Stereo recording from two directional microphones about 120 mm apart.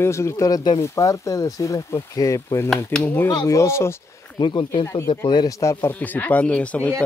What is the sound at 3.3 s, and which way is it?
Speech, 25° left (ahead or behind).